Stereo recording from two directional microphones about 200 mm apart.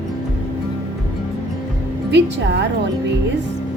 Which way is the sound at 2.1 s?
60° right (ahead or behind).